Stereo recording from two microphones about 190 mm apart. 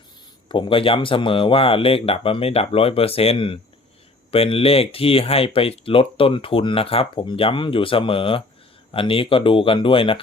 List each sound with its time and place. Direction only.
0.4 s speech: 25° left (ahead or behind)